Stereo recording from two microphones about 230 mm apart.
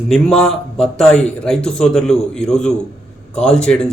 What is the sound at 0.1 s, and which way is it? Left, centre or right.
A man's voice, centre.